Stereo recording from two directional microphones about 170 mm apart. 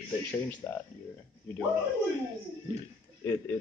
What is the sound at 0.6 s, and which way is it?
Speech, 10° left (ahead or behind).